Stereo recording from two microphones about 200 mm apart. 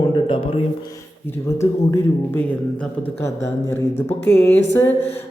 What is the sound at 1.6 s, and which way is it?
Speech, 15° left (ahead or behind).